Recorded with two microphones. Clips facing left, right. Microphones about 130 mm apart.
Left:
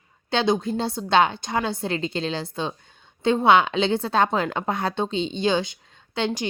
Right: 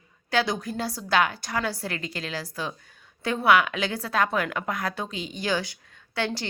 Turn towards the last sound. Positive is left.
turn(degrees=20)  # may be behind; listen again after turning